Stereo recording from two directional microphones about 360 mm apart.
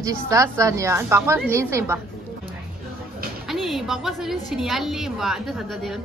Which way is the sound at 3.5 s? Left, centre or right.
Centre.